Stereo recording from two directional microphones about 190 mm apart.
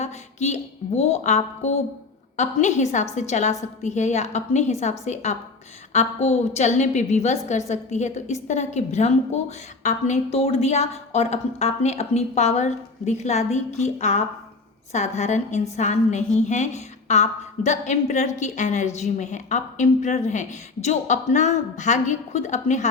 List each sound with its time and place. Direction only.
0.0 s speech: 35° left (ahead or behind)